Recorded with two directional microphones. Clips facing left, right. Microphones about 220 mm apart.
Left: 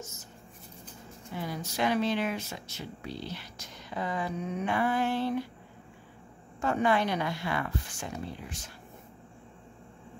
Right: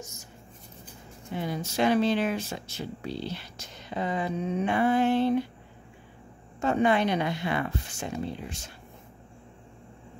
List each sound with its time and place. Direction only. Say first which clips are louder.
0.0 s a sound: right 1 dB; 15° right (ahead or behind)
1.3 s speech: right 5 dB; 25° right (ahead or behind)
6.6 s speech: right 3 dB; 20° right (ahead or behind)